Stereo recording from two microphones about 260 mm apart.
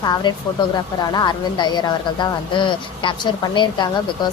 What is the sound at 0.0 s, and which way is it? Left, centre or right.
A woman's voice, centre.